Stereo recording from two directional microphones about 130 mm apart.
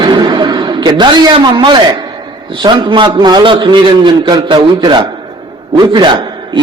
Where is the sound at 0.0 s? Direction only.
35° right (ahead or behind).